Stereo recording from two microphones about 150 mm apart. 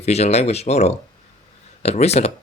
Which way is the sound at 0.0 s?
45° left (ahead or behind).